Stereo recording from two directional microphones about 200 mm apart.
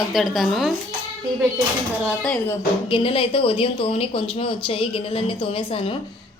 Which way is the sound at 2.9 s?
25° left (ahead or behind).